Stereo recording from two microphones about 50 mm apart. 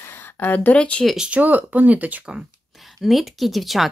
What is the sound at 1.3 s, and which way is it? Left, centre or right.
Speech, right.